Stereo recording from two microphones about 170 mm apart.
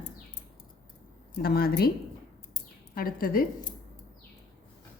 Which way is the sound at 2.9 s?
55° left (ahead or behind).